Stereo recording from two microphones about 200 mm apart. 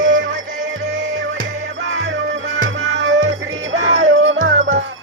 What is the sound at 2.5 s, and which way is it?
Music, 80° right.